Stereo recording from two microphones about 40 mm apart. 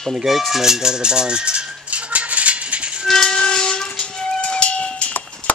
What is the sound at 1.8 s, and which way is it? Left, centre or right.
Rattle, right.